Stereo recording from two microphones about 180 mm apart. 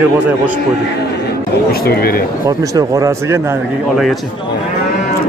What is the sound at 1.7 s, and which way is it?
Speech, 55° left (ahead or behind).